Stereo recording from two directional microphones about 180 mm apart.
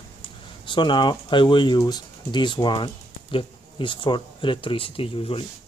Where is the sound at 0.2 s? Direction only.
25° left (ahead or behind).